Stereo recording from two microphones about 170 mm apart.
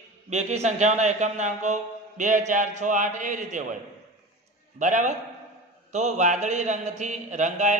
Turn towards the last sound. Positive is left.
turn(degrees=-45)  # may be behind; listen again after turning